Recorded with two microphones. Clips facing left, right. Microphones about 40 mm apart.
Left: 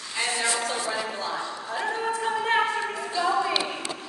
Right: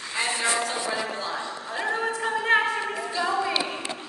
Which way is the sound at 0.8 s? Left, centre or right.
Centre.